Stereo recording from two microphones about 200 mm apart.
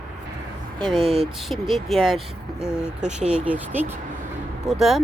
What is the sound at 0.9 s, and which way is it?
Speech, 25° right (ahead or behind).